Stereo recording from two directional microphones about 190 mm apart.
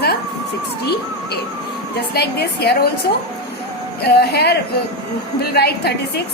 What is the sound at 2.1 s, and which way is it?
Speech, 55° left (ahead or behind).